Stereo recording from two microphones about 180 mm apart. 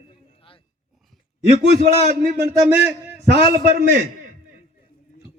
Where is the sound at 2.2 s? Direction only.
65° right (ahead or behind).